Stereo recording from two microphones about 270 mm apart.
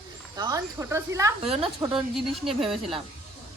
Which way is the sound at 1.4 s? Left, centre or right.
Right.